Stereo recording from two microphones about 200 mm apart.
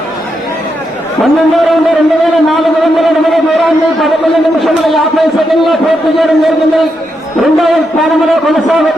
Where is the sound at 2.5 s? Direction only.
Centre (ahead or behind).